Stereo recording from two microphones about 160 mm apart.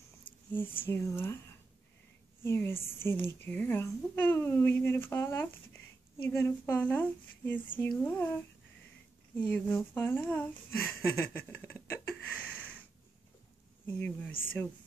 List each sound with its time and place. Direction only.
0.5 s a woman's voice: 15° left (ahead or behind)
9.4 s speech: 10° left (ahead or behind)
13.9 s a woman's voice: 10° left (ahead or behind)